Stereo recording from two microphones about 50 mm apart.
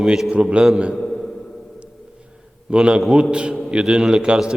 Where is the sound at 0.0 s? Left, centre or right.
Centre.